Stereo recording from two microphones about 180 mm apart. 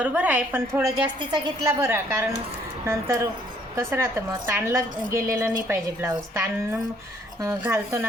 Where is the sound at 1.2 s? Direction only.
25° right (ahead or behind).